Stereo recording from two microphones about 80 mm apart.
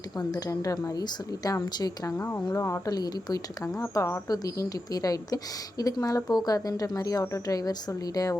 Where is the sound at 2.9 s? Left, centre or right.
Left.